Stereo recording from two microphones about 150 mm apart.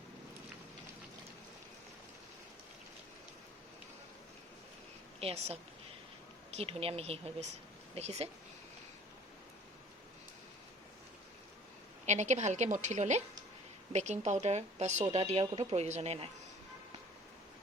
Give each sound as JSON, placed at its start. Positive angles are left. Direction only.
{"t": 5.2, "sound": "speech", "side_deg": -45}
{"t": 6.6, "sound": "speech", "side_deg": -40}
{"t": 12.0, "sound": "speech", "side_deg": -50}